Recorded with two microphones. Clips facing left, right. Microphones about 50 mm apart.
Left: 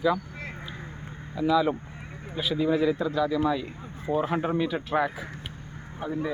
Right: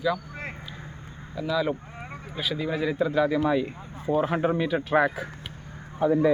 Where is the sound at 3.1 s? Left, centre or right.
Right.